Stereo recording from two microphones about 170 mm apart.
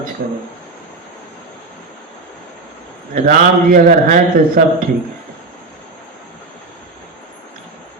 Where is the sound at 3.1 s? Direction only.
55° right (ahead or behind).